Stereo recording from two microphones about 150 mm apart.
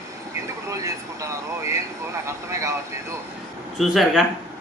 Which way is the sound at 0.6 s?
20° right (ahead or behind).